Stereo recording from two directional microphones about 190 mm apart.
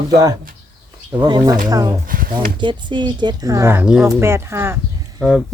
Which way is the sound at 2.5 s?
25° right (ahead or behind).